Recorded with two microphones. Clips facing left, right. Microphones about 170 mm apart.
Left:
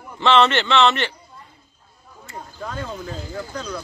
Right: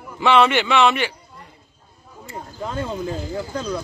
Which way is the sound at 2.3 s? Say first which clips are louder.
Right 3 dB; 25° right (ahead or behind).